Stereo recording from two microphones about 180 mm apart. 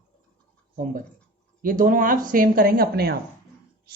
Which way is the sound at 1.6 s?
50° right (ahead or behind).